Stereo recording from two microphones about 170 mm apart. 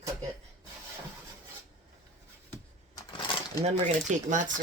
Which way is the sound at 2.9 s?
25° left (ahead or behind).